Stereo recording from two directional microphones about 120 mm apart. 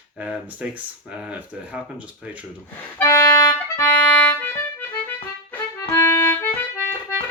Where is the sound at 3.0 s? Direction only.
25° left (ahead or behind).